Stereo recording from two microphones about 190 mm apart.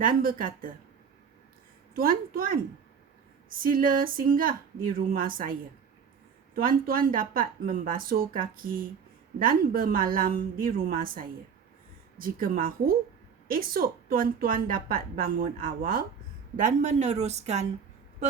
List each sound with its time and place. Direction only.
0.0 s a woman's voice: 50° right (ahead or behind)
2.0 s a woman's voice: 50° right (ahead or behind)